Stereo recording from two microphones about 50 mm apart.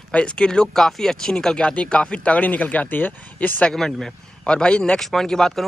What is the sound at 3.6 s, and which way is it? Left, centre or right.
Speech, centre.